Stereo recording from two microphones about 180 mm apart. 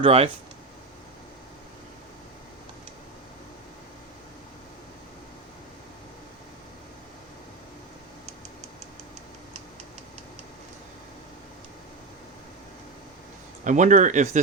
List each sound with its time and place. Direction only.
0.0 s speech: 35° right (ahead or behind)
13.7 s speech: 45° right (ahead or behind)